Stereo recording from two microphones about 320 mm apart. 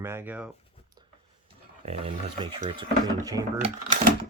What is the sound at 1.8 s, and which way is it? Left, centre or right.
Speech, centre.